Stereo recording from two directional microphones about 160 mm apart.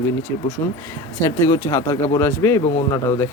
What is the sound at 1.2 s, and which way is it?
Speech, 20° left (ahead or behind).